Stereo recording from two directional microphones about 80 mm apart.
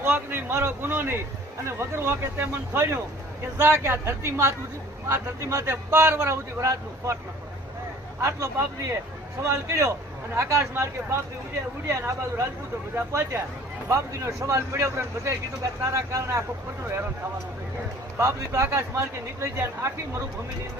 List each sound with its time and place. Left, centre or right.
0.0 s a man's voice: right
8.2 s speech: right
13.9 s speech: right
18.2 s speech: right